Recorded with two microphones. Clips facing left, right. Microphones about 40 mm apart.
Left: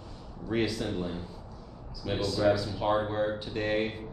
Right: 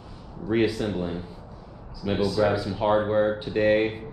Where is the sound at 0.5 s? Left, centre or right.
Centre.